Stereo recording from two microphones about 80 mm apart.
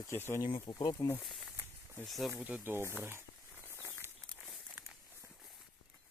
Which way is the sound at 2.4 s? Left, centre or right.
Centre.